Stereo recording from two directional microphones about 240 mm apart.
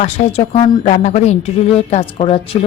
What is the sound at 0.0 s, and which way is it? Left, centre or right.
A woman's voice, left.